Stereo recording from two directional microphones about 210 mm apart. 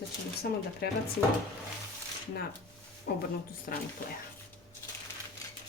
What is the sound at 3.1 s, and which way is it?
Speech, 45° left (ahead or behind).